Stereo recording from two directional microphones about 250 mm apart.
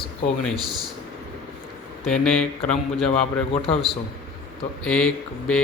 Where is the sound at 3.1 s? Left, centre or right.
Left.